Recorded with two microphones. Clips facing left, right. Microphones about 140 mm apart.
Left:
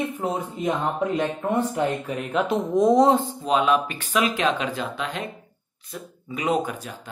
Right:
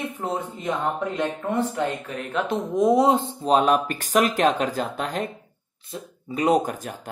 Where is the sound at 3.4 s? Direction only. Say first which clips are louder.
Right 3 dB; 40° right (ahead or behind).